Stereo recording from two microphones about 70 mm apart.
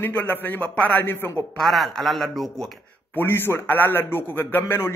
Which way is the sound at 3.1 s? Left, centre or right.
Left.